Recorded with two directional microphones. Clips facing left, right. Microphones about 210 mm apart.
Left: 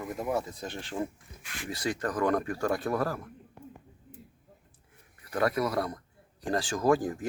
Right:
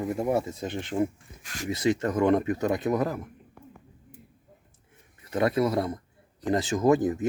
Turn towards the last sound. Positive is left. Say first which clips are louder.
# right 4 dB
turn(degrees=-20)  # may be behind; listen again after turning